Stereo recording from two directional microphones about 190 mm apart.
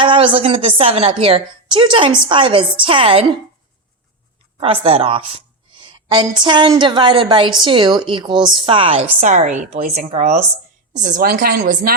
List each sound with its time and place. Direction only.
0.0 s a woman's voice: 25° right (ahead or behind)
4.6 s a woman's voice: 30° right (ahead or behind)
9.2 s a woman's voice: 40° right (ahead or behind)